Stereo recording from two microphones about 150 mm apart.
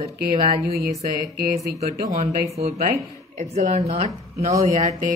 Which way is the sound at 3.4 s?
55° right (ahead or behind).